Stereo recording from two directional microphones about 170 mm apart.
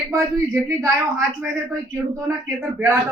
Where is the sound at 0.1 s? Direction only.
20° right (ahead or behind).